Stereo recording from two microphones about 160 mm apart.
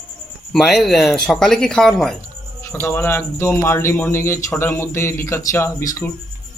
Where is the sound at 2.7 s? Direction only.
15° left (ahead or behind).